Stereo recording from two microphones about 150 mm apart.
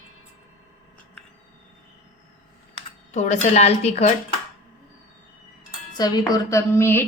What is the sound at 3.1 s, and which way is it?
Speech, 50° left (ahead or behind).